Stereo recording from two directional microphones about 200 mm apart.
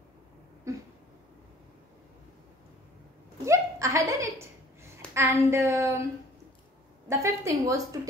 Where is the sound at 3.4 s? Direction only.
15° right (ahead or behind).